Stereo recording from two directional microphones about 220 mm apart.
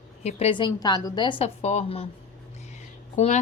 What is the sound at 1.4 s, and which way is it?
A woman's voice, 30° left (ahead or behind).